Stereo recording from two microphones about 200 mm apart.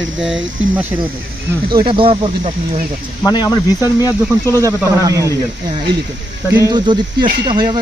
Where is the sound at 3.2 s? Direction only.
20° left (ahead or behind).